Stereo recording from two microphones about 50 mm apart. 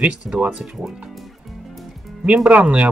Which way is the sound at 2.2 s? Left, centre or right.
Right.